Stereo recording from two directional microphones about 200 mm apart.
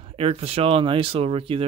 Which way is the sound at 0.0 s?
30° right (ahead or behind).